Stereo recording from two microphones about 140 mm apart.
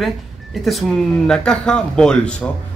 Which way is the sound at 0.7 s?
Centre (ahead or behind).